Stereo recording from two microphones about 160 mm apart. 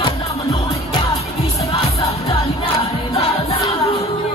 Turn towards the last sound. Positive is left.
turn(degrees=40)  # may be behind; listen again after turning